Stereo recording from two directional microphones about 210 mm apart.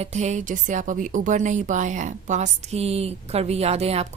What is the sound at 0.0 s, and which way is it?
A woman's voice, 30° right (ahead or behind).